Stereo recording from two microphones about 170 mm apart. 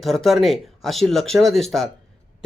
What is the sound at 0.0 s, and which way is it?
A man's voice, centre (ahead or behind).